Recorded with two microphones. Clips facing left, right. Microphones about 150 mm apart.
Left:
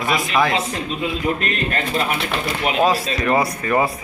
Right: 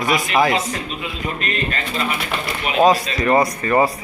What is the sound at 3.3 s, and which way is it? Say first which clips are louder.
Speech: right 3 dB; centre (ahead or behind).